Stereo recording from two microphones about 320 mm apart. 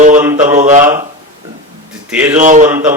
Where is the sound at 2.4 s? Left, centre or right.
Right.